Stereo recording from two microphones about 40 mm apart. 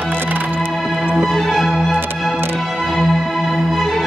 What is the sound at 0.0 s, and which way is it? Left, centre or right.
Music, right.